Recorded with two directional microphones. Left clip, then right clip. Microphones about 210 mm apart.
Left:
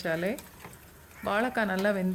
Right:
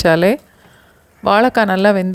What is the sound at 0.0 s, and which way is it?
Speech, 45° right (ahead or behind).